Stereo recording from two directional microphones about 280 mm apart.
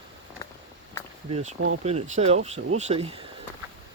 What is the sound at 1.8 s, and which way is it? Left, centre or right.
Speech, right.